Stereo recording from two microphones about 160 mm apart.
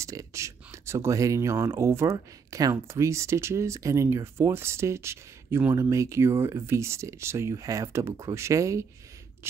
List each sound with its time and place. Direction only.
0.0 s speech: 20° right (ahead or behind)